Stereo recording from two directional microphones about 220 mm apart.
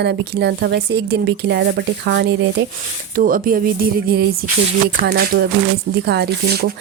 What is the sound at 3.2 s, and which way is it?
Speech, 40° right (ahead or behind).